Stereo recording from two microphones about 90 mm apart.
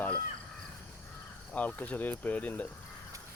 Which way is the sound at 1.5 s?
15° left (ahead or behind).